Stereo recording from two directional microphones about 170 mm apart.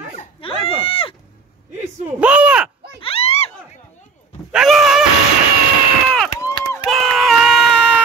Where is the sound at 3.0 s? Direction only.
35° left (ahead or behind).